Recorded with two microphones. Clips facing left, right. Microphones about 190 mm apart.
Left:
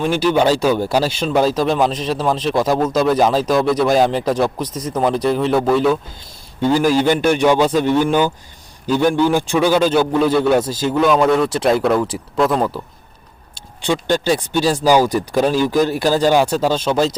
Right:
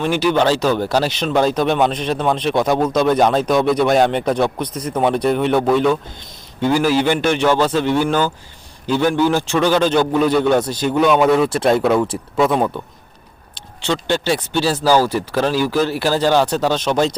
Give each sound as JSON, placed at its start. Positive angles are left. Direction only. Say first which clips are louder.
{"t": 0.1, "sound": "speech", "louder": "right 1 dB", "side_deg": -10}
{"t": 0.3, "sound": "a man's voice", "louder": "left 1 dB", "side_deg": 10}
{"t": 4.7, "sound": "speech", "louder": "even", "side_deg": 20}
{"t": 4.9, "sound": "a man's voice", "louder": "even", "side_deg": 0}
{"t": 6.6, "sound": "speech", "louder": "left 1 dB", "side_deg": -10}
{"t": 7.2, "sound": "a man's voice", "louder": "left 2 dB", "side_deg": 15}
{"t": 13.8, "sound": "a man's voice", "louder": "left 2 dB", "side_deg": 15}